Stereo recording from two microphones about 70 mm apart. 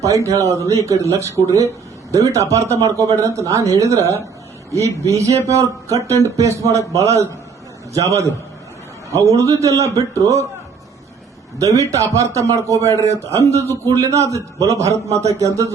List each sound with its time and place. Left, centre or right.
0.0 s a man's voice: right
11.6 s a man's voice: right